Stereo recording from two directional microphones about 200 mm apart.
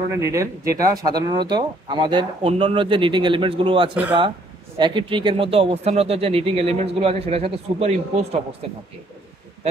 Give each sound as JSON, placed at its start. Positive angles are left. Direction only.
{"t": 0.1, "sound": "speech", "side_deg": -15}